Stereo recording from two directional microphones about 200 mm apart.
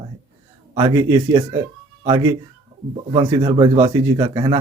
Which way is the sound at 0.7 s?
20° right (ahead or behind).